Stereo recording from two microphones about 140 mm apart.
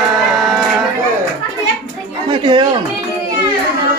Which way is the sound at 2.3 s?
35° right (ahead or behind).